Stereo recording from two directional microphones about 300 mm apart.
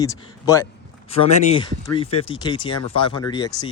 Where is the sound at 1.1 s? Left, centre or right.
Left.